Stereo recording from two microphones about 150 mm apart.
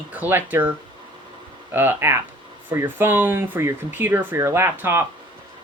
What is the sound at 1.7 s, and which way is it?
Speech, 15° right (ahead or behind).